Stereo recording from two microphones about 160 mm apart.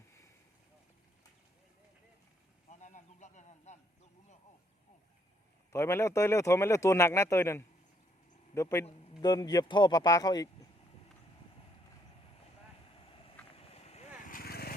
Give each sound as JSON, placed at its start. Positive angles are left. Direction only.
{"t": 2.6, "sound": "a sound", "side_deg": 45}
{"t": 5.7, "sound": "a man's voice", "side_deg": 15}
{"t": 13.1, "sound": "vehicle", "side_deg": 35}
{"t": 13.6, "sound": "boat", "side_deg": 40}
{"t": 14.3, "sound": "vehicle", "side_deg": 65}